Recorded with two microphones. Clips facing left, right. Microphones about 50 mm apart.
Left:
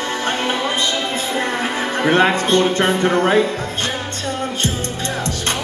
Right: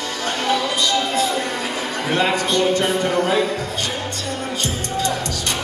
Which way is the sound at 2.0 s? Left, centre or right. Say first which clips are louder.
Left 5 dB; left.